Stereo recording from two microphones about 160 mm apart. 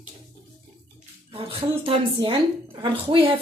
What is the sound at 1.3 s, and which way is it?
A woman's voice, 35° right (ahead or behind).